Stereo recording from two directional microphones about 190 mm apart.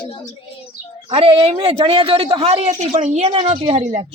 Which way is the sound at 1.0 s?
30° right (ahead or behind).